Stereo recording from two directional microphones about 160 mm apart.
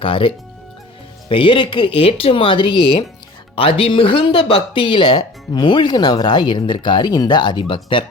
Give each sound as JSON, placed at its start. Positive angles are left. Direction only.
{"t": 0.0, "sound": "speech", "side_deg": 35}